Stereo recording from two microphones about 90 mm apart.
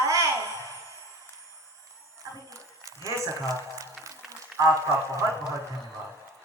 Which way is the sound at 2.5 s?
35° right (ahead or behind).